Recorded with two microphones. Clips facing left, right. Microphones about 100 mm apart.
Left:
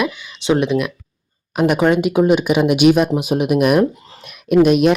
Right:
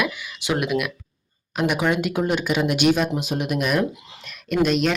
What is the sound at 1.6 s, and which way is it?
Speech, 45° left (ahead or behind).